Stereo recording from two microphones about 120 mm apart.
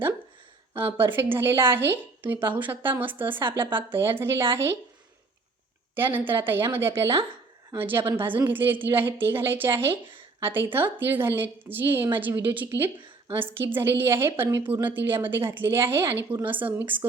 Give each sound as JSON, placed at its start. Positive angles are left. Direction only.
{"t": 0.8, "sound": "a woman's voice", "side_deg": -20}
{"t": 5.9, "sound": "a woman's voice", "side_deg": -15}